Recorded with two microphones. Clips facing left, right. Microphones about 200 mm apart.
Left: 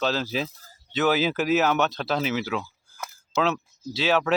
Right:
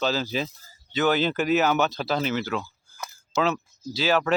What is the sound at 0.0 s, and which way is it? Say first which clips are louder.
Speech: even; centre (ahead or behind).